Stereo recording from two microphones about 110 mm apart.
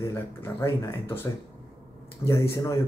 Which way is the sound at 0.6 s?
25° left (ahead or behind).